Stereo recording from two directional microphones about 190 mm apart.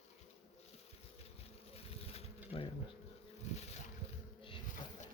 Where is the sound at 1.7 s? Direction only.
30° left (ahead or behind).